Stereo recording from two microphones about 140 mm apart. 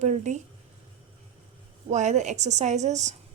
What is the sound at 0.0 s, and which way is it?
Speech, 55° right (ahead or behind).